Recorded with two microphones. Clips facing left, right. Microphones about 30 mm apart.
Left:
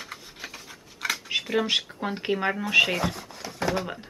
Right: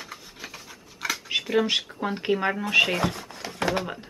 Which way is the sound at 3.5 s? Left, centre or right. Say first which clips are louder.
Right 1 dB; centre.